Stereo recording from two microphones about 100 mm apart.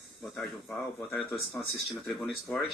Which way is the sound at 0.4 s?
5° left (ahead or behind).